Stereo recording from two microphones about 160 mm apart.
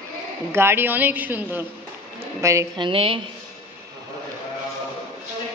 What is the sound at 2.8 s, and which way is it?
Speech, 35° right (ahead or behind).